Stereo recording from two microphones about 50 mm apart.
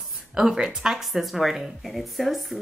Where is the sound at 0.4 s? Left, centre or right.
Centre.